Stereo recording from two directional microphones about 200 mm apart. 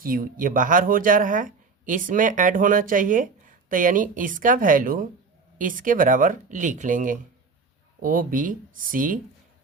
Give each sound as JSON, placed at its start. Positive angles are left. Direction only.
{"t": 0.0, "sound": "speech", "side_deg": -45}